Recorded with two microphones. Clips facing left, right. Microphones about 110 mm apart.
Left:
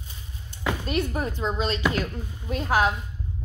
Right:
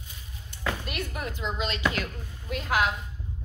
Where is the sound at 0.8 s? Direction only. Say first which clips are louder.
Left 7 dB; 30° left (ahead or behind).